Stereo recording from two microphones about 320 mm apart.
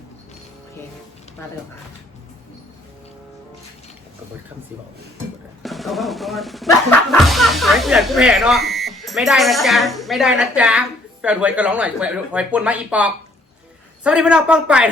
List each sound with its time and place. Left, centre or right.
5.6 s speech: centre